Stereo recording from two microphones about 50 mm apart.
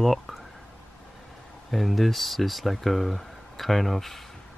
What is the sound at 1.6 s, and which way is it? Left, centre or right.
Speech, centre.